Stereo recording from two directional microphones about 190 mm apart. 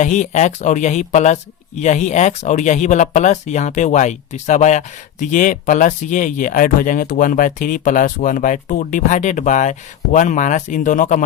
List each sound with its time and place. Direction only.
0.0 s speech: 40° left (ahead or behind)